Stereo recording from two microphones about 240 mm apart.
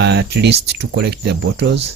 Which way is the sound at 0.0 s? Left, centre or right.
Right.